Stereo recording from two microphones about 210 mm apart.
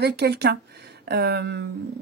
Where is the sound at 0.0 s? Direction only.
50° right (ahead or behind).